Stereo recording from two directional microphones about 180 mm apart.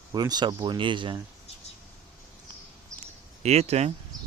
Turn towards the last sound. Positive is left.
turn(degrees=-35)  # may be behind; listen again after turning